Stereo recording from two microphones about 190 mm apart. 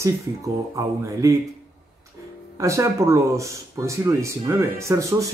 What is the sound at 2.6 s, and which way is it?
Speech, 15° right (ahead or behind).